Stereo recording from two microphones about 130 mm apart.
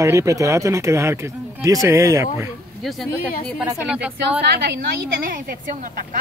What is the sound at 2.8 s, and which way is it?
A woman's voice, centre (ahead or behind).